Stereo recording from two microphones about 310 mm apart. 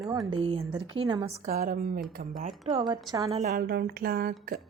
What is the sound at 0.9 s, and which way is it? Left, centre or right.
Speech, centre.